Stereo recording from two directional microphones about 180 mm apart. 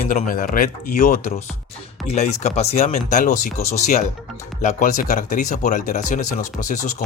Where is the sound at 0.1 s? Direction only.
50° left (ahead or behind).